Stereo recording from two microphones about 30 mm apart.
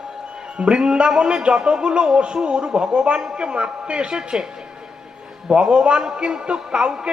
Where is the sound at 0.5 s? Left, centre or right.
Right.